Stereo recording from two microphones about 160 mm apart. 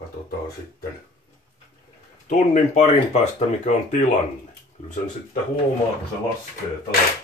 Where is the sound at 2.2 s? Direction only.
50° left (ahead or behind).